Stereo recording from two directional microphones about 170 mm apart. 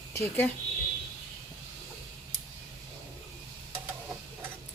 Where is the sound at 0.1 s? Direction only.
15° left (ahead or behind).